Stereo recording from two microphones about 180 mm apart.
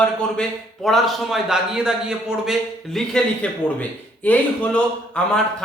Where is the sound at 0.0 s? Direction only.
5° left (ahead or behind).